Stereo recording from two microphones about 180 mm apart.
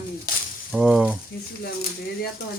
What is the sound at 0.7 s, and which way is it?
Speech, 5° right (ahead or behind).